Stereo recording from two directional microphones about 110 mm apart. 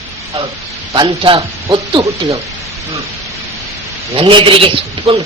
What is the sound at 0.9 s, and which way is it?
Speech, 45° right (ahead or behind).